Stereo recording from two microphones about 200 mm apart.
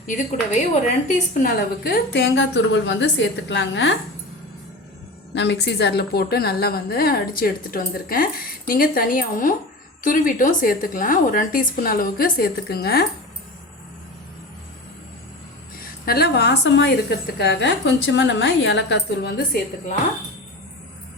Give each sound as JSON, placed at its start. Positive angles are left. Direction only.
{"t": 1.0, "sound": "a woman's voice", "side_deg": 40}
{"t": 5.3, "sound": "a woman's voice", "side_deg": 60}
{"t": 16.0, "sound": "a woman's voice", "side_deg": 50}